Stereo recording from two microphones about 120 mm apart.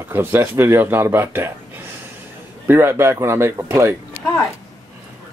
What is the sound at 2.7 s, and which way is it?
Speech, 20° right (ahead or behind).